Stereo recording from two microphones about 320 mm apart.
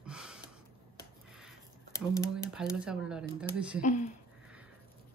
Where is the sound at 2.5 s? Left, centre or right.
Centre.